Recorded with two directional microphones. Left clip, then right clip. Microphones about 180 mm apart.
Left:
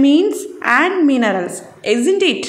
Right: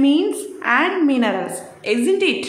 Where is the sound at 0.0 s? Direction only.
30° left (ahead or behind).